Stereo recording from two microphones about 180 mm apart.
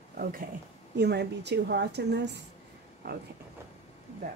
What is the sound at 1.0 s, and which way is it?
A woman's voice, 65° right (ahead or behind).